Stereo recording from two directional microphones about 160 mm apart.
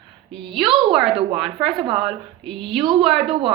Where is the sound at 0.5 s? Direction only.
Centre (ahead or behind).